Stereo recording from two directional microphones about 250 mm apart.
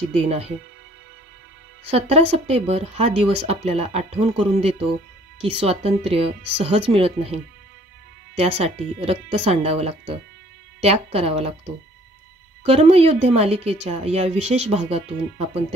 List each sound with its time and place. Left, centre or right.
0.1 s speech: right
1.9 s speech: right
8.4 s speech: right